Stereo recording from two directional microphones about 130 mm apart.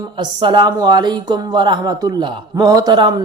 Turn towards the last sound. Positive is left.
turn(degrees=-35)  # may be behind; listen again after turning